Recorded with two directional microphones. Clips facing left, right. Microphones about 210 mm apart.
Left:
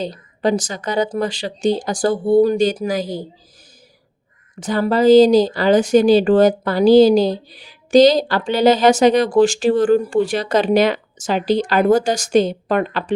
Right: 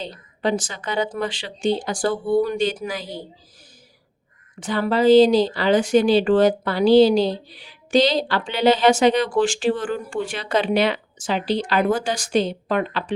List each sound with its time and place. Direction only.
0.0 s speech: 40° left (ahead or behind)
4.6 s speech: 40° left (ahead or behind)